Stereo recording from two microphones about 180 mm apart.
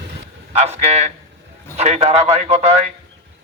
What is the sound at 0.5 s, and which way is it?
Speech, 35° right (ahead or behind).